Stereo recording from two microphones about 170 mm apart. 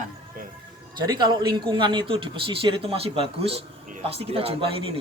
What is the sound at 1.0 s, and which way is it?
A man's voice, 25° right (ahead or behind).